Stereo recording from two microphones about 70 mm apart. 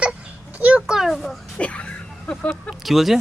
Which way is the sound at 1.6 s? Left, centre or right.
Centre.